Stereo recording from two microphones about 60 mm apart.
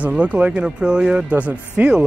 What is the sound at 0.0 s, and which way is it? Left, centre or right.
Speech, right.